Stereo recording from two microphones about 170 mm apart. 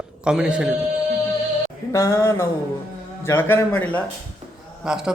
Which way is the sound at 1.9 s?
15° left (ahead or behind).